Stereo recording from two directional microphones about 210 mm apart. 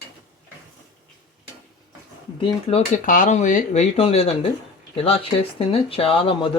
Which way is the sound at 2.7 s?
30° left (ahead or behind).